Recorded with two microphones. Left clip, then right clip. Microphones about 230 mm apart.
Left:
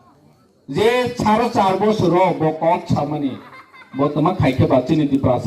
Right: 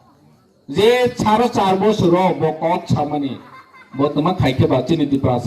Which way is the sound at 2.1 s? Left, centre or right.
Right.